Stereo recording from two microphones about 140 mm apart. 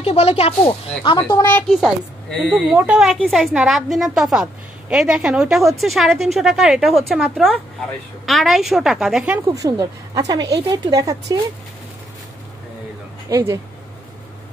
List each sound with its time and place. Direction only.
0.0 s speech: 50° left (ahead or behind)
1.7 s a woman's voice: centre (ahead or behind)
9.5 s a woman's voice: 25° right (ahead or behind)
13.3 s a woman's voice: 20° right (ahead or behind)